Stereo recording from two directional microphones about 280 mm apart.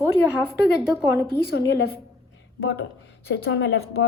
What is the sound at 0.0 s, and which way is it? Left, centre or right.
A woman's voice, centre.